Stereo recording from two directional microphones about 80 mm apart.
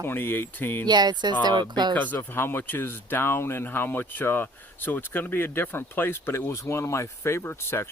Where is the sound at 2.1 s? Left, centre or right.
Left.